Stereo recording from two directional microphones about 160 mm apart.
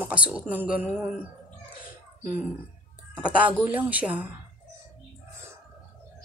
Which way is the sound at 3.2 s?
10° right (ahead or behind).